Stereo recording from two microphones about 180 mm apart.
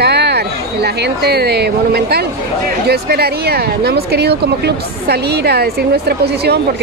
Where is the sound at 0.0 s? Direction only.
65° right (ahead or behind).